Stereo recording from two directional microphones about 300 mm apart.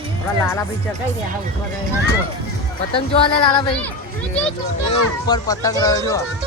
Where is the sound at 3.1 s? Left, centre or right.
Centre.